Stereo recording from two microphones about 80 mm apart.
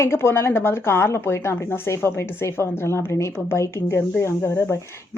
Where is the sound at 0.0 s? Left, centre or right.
Left.